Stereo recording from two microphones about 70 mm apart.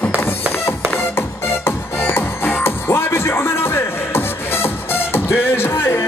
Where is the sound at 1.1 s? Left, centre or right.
Left.